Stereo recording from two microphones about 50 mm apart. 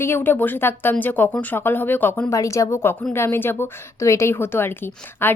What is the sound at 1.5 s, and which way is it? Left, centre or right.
Speech, left.